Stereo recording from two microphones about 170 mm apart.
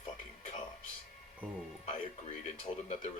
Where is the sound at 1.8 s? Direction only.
45° left (ahead or behind).